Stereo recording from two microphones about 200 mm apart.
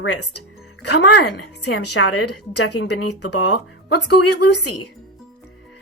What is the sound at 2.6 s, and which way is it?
Speech, 60° left (ahead or behind).